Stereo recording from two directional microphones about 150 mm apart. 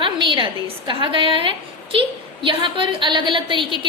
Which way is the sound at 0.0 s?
30° right (ahead or behind).